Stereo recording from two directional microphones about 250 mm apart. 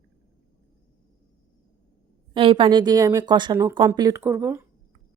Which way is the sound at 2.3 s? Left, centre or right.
Right.